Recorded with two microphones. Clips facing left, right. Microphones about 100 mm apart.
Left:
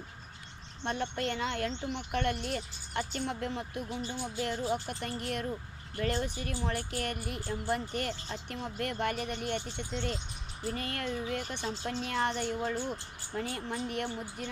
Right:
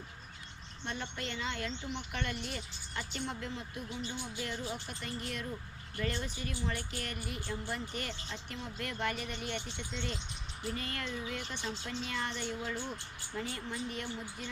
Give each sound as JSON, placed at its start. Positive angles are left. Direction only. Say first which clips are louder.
{"t": 0.9, "sound": "speech", "louder": "left 7 dB", "side_deg": 50}
{"t": 4.4, "sound": "speech", "louder": "left 9 dB", "side_deg": 40}
{"t": 6.2, "sound": "speech", "louder": "left 3 dB", "side_deg": 50}